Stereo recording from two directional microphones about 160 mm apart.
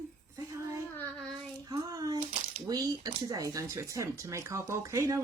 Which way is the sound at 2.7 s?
20° right (ahead or behind).